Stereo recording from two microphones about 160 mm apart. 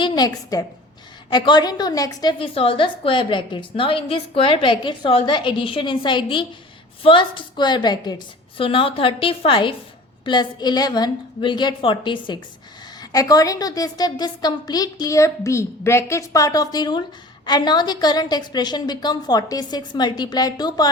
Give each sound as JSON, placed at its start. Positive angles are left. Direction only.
{"t": 0.0, "sound": "a woman's voice", "side_deg": 25}
{"t": 2.4, "sound": "a woman's voice", "side_deg": 35}